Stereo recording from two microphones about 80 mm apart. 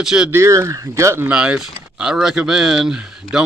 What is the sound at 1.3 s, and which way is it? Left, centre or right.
Speech, centre.